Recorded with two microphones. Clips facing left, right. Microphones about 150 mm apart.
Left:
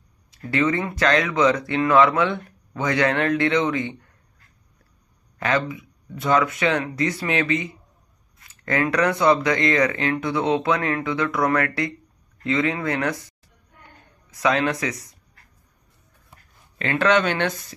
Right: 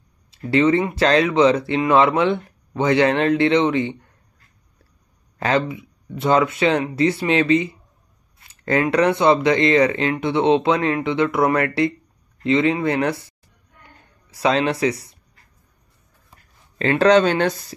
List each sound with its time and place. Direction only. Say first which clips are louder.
0.4 s speech: right 5 dB; 30° right (ahead or behind)
5.4 s speech: right 3 dB; 30° right (ahead or behind)
14.3 s speech: right 2 dB; 30° right (ahead or behind)
16.7 s speech: right 5 dB; 30° right (ahead or behind)